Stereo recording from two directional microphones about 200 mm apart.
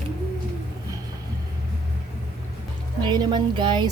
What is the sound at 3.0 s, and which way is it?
Speech, 20° right (ahead or behind).